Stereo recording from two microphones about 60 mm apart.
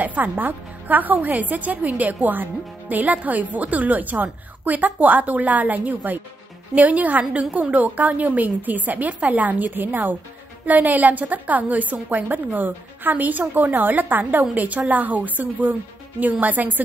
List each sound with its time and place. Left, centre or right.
0.0 s a woman's voice: right